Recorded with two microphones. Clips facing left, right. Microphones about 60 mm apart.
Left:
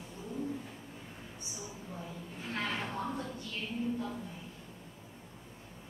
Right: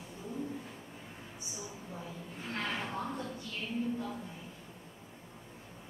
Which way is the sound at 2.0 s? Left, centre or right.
Centre.